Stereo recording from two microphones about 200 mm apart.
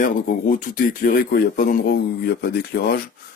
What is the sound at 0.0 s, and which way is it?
Speech, 45° left (ahead or behind).